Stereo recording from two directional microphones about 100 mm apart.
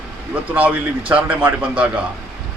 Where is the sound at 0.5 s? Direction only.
15° right (ahead or behind).